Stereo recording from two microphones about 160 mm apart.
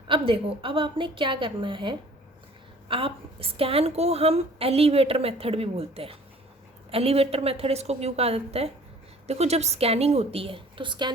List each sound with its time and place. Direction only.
0.1 s a woman's voice: 35° right (ahead or behind)